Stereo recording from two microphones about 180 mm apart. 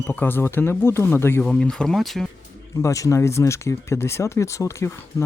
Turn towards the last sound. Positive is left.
turn(degrees=15)  # may be behind; listen again after turning